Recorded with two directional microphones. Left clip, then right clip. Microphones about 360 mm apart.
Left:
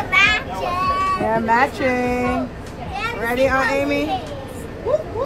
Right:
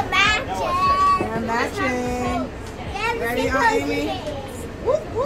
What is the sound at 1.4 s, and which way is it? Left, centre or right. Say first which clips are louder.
A woman's voice: left 5 dB; left.